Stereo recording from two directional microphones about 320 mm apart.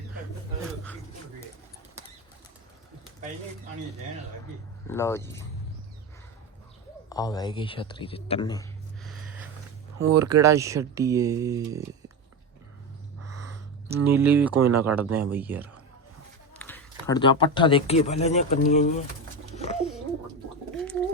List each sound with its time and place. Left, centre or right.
4.9 s speech: centre
7.1 s speech: centre
10.2 s speech: centre
13.2 s a sound: right
13.8 s speech: centre
14.5 s speech: right
14.8 s speech: centre
16.6 s speech: centre; by 19.0 s left
19.5 s bird: centre